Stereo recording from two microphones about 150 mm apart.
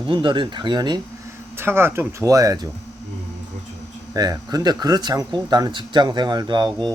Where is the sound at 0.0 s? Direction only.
35° right (ahead or behind).